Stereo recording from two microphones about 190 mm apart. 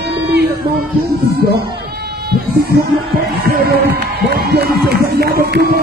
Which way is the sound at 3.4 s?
55° right (ahead or behind).